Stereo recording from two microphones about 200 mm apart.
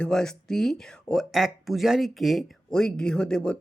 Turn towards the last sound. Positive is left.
turn(degrees=5)  # may be behind; listen again after turning